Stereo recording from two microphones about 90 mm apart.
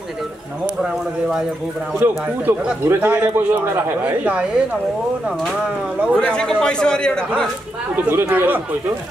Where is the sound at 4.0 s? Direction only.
15° right (ahead or behind).